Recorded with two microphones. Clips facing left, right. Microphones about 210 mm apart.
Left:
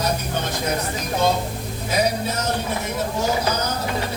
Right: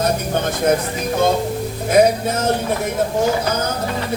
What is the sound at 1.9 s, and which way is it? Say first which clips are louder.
Music: right 8 dB; 50° right (ahead or behind).